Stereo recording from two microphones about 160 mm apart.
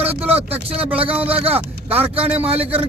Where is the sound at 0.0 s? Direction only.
40° right (ahead or behind).